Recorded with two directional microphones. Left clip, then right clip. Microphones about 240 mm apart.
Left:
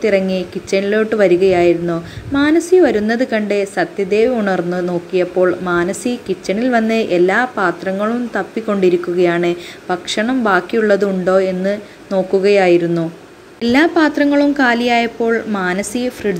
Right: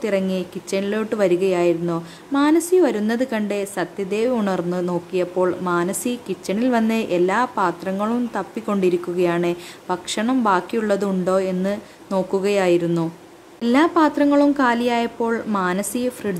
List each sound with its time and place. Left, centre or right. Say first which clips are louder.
0.0 s speech: left 7 dB; centre